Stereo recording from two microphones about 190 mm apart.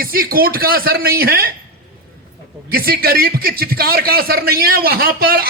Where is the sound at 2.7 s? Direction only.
50° right (ahead or behind).